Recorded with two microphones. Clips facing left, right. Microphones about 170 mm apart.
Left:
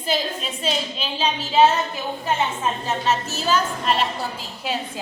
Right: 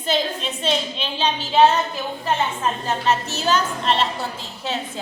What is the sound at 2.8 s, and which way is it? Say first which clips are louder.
A woman's voice: right 2 dB; 5° left (ahead or behind).